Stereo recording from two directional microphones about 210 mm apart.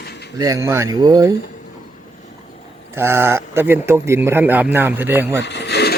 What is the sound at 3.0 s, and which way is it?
A man's voice, 10° right (ahead or behind).